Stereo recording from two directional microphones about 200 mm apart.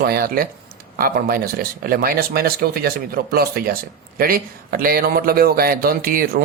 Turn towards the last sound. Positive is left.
turn(degrees=-45)  # may be behind; listen again after turning